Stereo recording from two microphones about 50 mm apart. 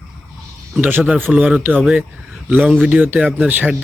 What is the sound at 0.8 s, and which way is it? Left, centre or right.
Speech, right.